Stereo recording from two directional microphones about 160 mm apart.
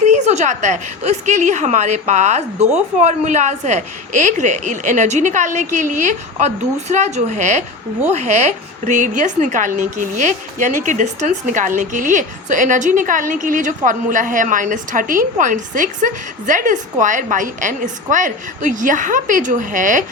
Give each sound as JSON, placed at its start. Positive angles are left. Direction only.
{"t": 0.0, "sound": "speech", "side_deg": -45}